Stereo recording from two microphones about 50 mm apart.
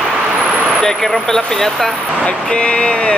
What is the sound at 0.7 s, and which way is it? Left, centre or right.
Speech, centre.